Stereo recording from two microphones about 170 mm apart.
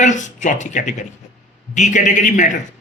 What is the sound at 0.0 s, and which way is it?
Speech, 45° left (ahead or behind).